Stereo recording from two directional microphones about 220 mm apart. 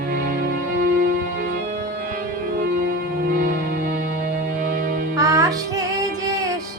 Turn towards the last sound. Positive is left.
turn(degrees=-15)  # may be behind; listen again after turning